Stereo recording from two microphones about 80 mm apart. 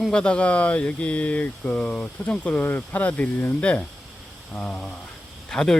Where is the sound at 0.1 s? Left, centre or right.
Centre.